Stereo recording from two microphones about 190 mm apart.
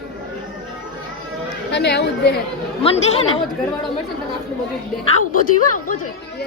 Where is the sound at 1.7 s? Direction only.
60° left (ahead or behind).